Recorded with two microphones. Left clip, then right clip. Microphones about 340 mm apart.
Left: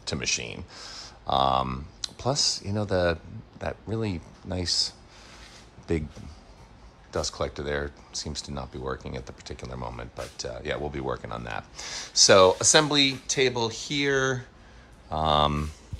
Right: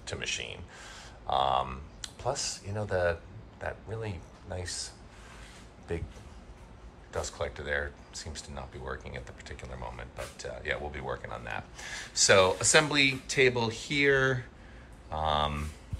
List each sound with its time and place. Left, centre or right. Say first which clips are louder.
0.0 s speech: left 6 dB; centre
7.1 s speech: left 5 dB; centre